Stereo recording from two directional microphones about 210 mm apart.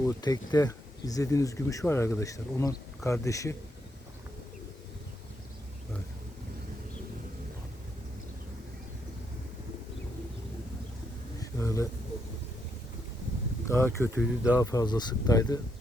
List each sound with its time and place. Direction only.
0.0 s speech: 15° left (ahead or behind)
11.3 s a sound: 15° left (ahead or behind)
13.7 s speech: 10° left (ahead or behind)
14.2 s speech: 5° right (ahead or behind)
14.6 s speech: 15° left (ahead or behind)